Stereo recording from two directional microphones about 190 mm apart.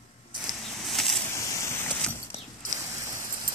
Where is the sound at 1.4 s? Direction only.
15° left (ahead or behind).